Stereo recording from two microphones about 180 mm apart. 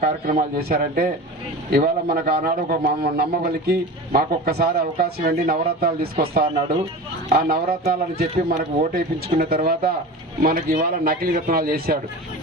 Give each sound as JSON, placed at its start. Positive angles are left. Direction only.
{"t": 0.0, "sound": "a man's voice", "side_deg": -55}